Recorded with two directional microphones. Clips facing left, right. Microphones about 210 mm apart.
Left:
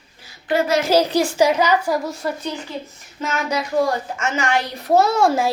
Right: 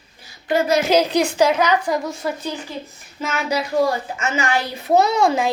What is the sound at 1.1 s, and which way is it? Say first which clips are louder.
Speech: even; 20° right (ahead or behind).